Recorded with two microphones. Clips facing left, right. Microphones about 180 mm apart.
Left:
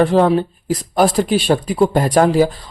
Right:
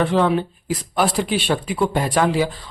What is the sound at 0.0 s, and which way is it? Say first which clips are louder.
Speech: left 5 dB; 40° left (ahead or behind).